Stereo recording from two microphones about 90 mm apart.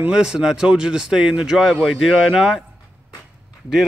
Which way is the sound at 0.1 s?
10° right (ahead or behind).